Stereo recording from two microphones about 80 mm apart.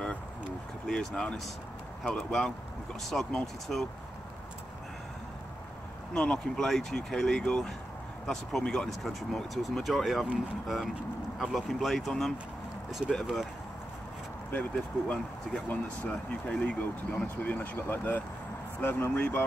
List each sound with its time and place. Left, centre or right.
0.8 s speech: centre
6.1 s speech: centre
11.3 s speech: centre
14.5 s speech: centre